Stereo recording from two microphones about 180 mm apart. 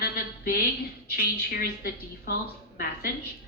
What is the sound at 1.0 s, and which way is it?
A woman's voice, 60° left (ahead or behind).